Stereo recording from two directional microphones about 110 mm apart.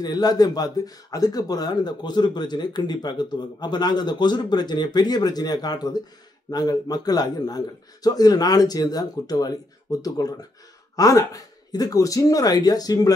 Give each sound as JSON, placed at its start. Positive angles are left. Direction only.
{"t": 0.0, "sound": "a man's voice", "side_deg": 35}